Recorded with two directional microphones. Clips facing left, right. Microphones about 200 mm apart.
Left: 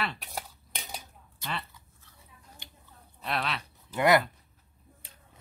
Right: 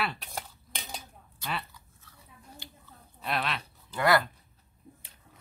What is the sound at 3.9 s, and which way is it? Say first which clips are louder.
Speech: left 2 dB; 20° left (ahead or behind).